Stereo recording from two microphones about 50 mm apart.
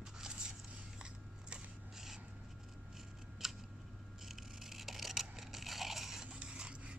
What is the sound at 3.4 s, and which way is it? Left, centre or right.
Scissors, centre.